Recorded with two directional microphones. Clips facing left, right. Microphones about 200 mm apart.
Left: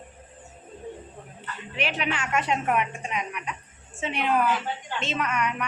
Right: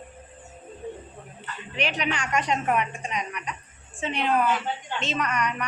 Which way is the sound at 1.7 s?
5° left (ahead or behind).